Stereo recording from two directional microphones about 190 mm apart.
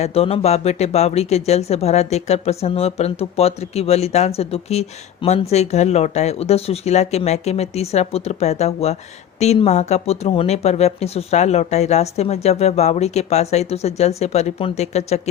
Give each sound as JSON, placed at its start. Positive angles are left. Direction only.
{"t": 0.0, "sound": "speech", "side_deg": 30}